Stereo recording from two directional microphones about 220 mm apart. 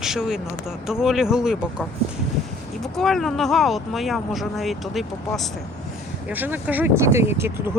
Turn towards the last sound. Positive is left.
turn(degrees=-10)  # may be behind; listen again after turning